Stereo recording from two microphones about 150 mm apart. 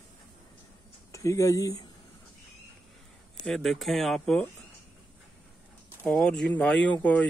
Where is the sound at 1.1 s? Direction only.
20° left (ahead or behind).